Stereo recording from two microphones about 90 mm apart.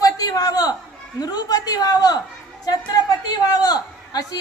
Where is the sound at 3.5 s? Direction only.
50° left (ahead or behind).